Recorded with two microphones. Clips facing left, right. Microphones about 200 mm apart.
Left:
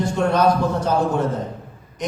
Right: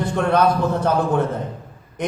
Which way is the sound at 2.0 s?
55° right (ahead or behind).